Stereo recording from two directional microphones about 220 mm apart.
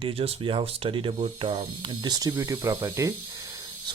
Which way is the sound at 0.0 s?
25° right (ahead or behind).